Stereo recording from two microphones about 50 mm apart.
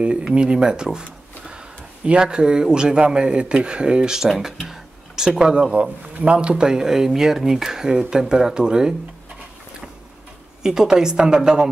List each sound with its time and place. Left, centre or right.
0.0 s speech: right
2.0 s speech: centre
10.6 s speech: centre